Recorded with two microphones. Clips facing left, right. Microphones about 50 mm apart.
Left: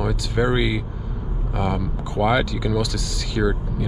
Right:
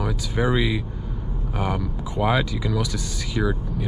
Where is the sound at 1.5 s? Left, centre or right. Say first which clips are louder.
Left 2 dB; centre.